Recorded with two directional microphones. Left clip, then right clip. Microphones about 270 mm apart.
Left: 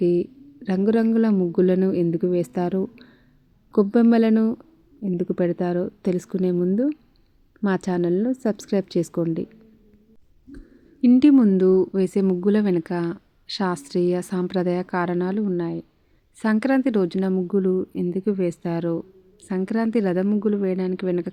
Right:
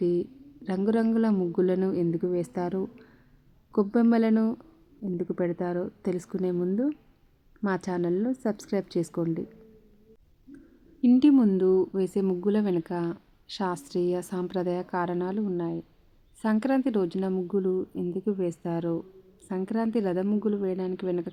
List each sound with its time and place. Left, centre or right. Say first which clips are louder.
0.0 s a woman's voice: left 6 dB; centre
11.0 s speech: left 5 dB; centre